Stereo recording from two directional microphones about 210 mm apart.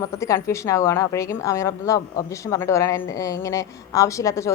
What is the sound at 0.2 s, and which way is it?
A woman's voice, 15° left (ahead or behind).